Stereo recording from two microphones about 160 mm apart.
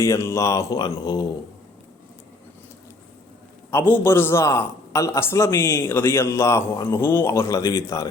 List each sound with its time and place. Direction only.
0.0 s speech: 20° left (ahead or behind)
3.7 s a man's voice: 15° left (ahead or behind)